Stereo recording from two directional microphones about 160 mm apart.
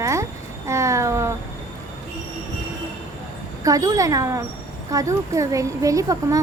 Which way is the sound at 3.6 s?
20° right (ahead or behind).